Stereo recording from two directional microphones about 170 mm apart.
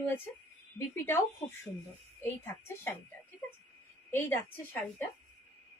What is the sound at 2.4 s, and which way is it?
Speech, 15° left (ahead or behind).